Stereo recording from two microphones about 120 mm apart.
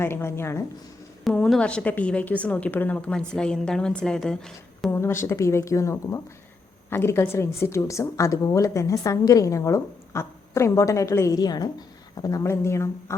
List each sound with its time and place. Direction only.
0.0 s a woman's voice: 20° left (ahead or behind)
1.3 s a woman's voice: 5° left (ahead or behind)
4.9 s a woman's voice: 20° left (ahead or behind)